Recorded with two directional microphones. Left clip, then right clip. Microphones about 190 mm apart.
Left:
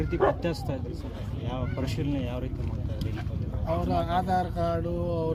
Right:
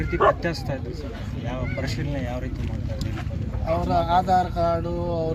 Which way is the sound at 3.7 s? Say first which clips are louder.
Right 6 dB; centre (ahead or behind).